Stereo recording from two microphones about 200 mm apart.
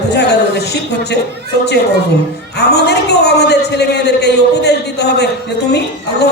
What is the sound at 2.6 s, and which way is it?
Speech, 55° left (ahead or behind).